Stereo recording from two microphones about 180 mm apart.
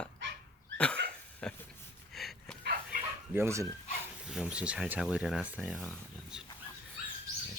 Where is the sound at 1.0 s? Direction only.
80° right.